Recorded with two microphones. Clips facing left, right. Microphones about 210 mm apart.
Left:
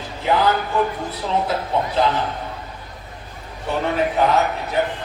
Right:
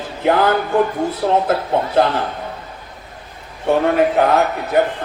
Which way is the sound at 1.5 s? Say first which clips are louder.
Right 4 dB; 55° right (ahead or behind).